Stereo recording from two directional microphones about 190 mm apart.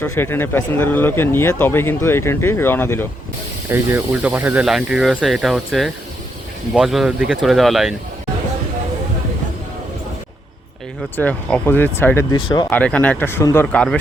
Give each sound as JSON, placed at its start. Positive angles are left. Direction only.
{"t": 0.0, "sound": "speech", "side_deg": 10}
{"t": 3.7, "sound": "speech", "side_deg": -10}
{"t": 11.2, "sound": "speech", "side_deg": 5}
{"t": 12.4, "sound": "speech", "side_deg": 25}
{"t": 12.7, "sound": "speech", "side_deg": 5}